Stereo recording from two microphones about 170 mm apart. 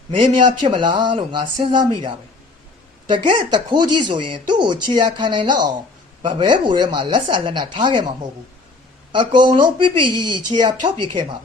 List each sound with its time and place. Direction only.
0.1 s a man's voice: 30° right (ahead or behind)
9.1 s a man's voice: 30° right (ahead or behind)